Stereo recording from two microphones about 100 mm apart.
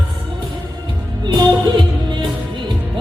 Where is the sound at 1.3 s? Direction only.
45° right (ahead or behind).